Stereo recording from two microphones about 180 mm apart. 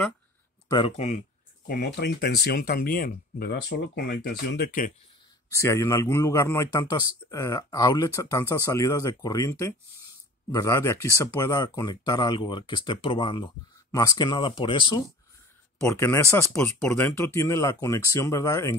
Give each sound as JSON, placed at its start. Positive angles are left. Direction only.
{"t": 0.7, "sound": "speech", "side_deg": 25}
{"t": 0.9, "sound": "speech", "side_deg": 40}
{"t": 1.7, "sound": "speech", "side_deg": 65}
{"t": 5.5, "sound": "a man's voice", "side_deg": 15}
{"t": 15.9, "sound": "a man's voice", "side_deg": 15}